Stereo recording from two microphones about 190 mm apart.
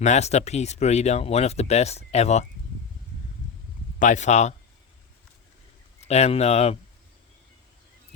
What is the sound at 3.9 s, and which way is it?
Speech, 40° left (ahead or behind).